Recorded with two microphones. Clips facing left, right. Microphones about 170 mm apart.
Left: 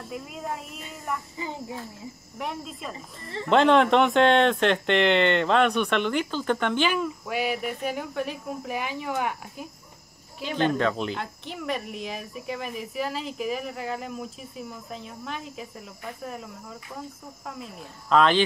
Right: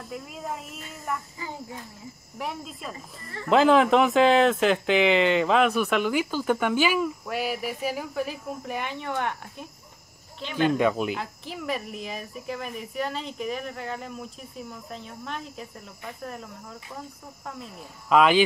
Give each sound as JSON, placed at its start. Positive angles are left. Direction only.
{"t": 0.1, "sound": "speech", "side_deg": 0}
{"t": 1.4, "sound": "a child's voice", "side_deg": 20}
{"t": 2.3, "sound": "speech", "side_deg": 0}
{"t": 10.8, "sound": "speech", "side_deg": -10}